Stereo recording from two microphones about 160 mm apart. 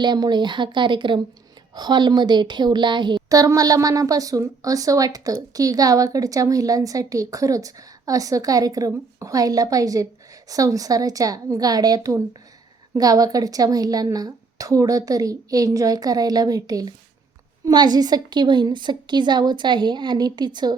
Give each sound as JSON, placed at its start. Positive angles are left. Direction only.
{"t": 0.0, "sound": "a woman's voice", "side_deg": -25}